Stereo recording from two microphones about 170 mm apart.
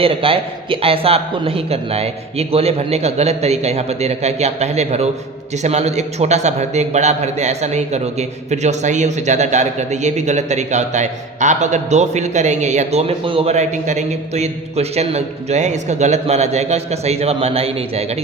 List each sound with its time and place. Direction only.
0.0 s a man's voice: 30° right (ahead or behind)